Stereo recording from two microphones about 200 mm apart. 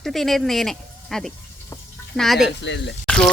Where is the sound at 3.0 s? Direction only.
5° left (ahead or behind).